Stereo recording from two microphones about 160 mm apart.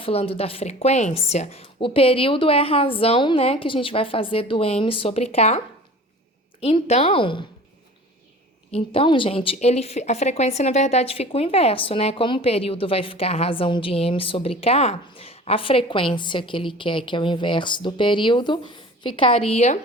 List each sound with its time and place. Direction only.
0.0 s a woman's voice: 35° left (ahead or behind)
8.7 s a woman's voice: 35° left (ahead or behind)